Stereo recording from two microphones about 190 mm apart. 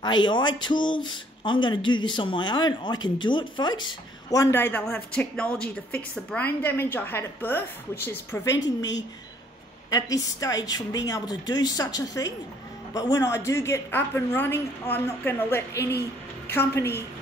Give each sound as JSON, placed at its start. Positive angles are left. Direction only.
{"t": 0.0, "sound": "speech", "side_deg": 25}
{"t": 9.8, "sound": "speech", "side_deg": 20}